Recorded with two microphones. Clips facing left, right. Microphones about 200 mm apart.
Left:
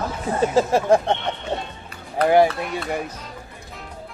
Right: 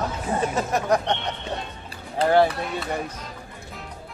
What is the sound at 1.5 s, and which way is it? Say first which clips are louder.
Music: left 5 dB; 25° left (ahead or behind).